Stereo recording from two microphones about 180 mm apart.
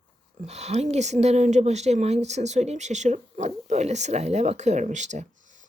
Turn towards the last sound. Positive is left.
turn(degrees=-40)  # may be behind; listen again after turning